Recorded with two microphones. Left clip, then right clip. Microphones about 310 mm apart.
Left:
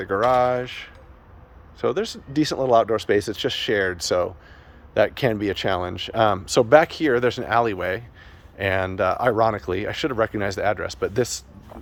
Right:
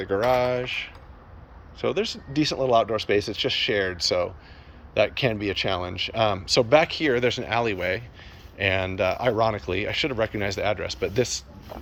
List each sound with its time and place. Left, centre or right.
0.0 s speech: centre